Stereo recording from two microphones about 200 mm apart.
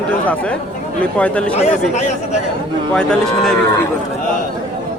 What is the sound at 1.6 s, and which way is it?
Speech, 35° left (ahead or behind).